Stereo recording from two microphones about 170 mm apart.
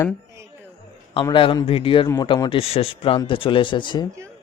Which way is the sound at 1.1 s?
30° left (ahead or behind).